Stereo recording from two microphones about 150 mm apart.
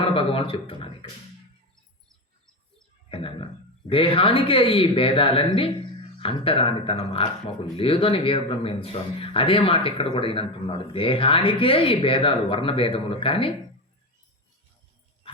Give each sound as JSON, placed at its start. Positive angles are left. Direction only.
{"t": 0.0, "sound": "speech", "side_deg": 35}
{"t": 3.1, "sound": "speech", "side_deg": 35}